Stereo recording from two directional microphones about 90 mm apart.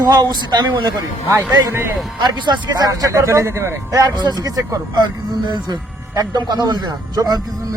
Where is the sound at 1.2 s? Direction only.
30° right (ahead or behind).